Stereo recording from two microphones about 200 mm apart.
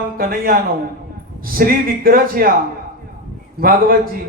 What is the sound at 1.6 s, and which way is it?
Speech, 45° right (ahead or behind).